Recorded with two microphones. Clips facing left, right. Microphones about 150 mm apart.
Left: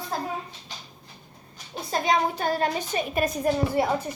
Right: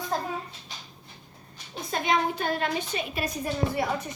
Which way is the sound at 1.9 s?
35° left (ahead or behind).